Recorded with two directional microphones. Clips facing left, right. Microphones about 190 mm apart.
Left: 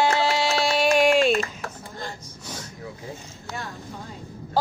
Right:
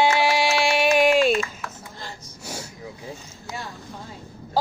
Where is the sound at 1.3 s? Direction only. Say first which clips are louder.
Even; 40° left (ahead or behind).